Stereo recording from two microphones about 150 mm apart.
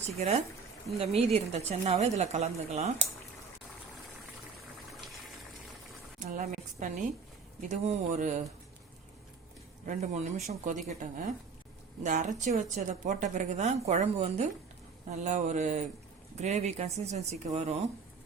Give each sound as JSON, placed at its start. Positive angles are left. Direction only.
{"t": 0.2, "sound": "a woman's voice", "side_deg": -45}
{"t": 6.1, "sound": "a sound", "side_deg": -55}
{"t": 7.7, "sound": "a woman's voice", "side_deg": -55}
{"t": 9.8, "sound": "a woman's voice", "side_deg": -50}